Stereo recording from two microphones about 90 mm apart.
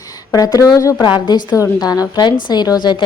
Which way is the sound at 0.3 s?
45° left (ahead or behind).